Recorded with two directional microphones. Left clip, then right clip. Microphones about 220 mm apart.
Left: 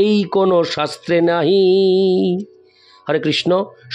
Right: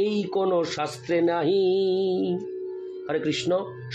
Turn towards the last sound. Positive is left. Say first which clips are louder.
# left 8 dB
turn(degrees=50)  # may be behind; listen again after turning